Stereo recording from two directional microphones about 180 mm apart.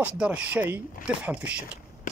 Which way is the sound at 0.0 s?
5° right (ahead or behind).